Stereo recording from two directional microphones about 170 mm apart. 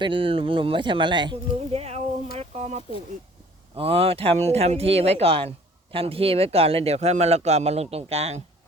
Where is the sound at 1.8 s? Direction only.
40° right (ahead or behind).